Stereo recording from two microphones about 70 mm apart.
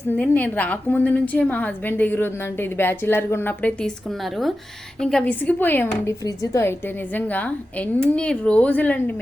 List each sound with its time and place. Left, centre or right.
0.1 s a woman's voice: left
3.6 s speech: centre
4.1 s speech: centre
5.2 s a woman's voice: left
6.2 s a woman's voice: left
6.6 s a woman's voice: left